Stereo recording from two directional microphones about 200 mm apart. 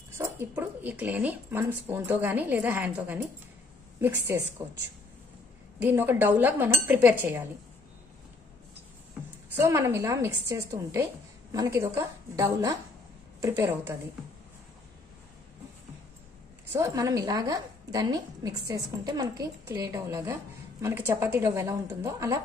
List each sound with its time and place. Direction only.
0.2 s a woman's voice: 10° right (ahead or behind)
5.8 s a woman's voice: 10° right (ahead or behind)
9.6 s a woman's voice: 15° right (ahead or behind)
16.7 s a woman's voice: 15° right (ahead or behind)